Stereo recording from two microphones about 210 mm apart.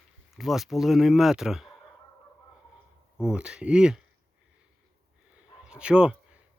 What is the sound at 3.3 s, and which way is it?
Speech, 5° right (ahead or behind).